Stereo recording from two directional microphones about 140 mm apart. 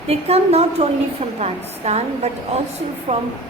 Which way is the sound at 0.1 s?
50° right (ahead or behind).